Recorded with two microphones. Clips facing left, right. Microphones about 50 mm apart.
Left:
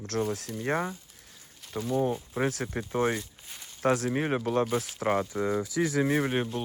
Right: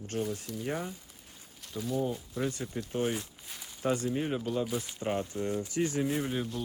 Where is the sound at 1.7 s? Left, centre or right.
Left.